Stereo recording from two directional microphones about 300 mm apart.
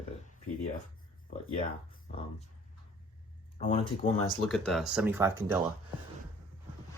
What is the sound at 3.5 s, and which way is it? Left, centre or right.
Speech, centre.